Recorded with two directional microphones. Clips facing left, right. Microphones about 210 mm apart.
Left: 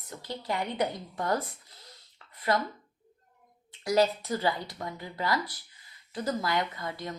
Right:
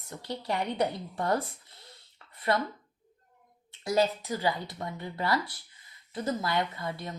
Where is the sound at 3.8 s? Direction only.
25° right (ahead or behind).